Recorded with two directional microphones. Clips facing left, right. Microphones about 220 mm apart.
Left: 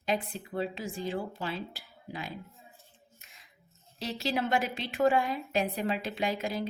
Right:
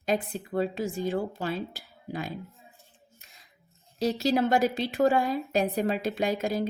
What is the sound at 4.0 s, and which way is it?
A woman's voice, 40° right (ahead or behind).